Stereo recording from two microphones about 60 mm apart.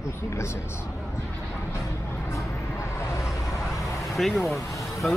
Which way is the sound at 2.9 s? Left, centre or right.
Left.